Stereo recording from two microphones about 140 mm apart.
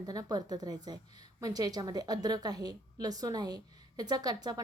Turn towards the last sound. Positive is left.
turn(degrees=-30)  # may be behind; listen again after turning